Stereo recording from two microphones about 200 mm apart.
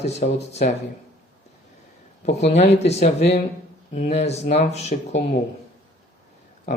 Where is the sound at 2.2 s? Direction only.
35° left (ahead or behind).